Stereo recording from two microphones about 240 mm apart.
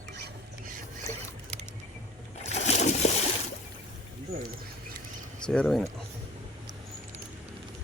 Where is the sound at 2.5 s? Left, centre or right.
Left.